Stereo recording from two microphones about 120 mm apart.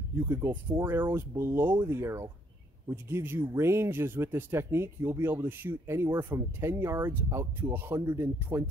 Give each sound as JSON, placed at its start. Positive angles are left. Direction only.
{"t": 0.3, "sound": "speech", "side_deg": -20}